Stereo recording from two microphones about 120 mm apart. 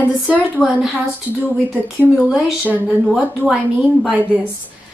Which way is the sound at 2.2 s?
5° right (ahead or behind).